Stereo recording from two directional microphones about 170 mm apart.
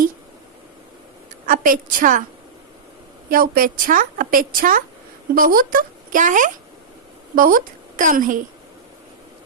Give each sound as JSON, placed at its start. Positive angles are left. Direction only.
{"t": 1.5, "sound": "a woman's voice", "side_deg": -50}
{"t": 3.2, "sound": "a woman's voice", "side_deg": -55}